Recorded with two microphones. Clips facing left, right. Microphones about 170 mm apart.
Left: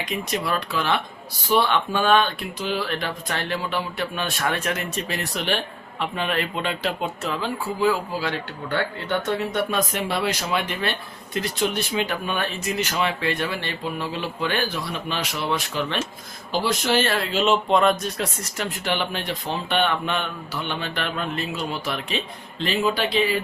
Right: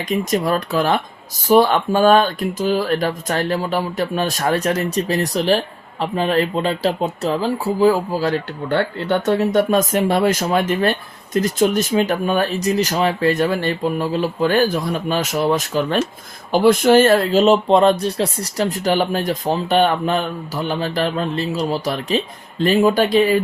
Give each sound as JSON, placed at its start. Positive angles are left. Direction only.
{"t": 0.3, "sound": "speech", "side_deg": -45}
{"t": 16.5, "sound": "speech", "side_deg": -55}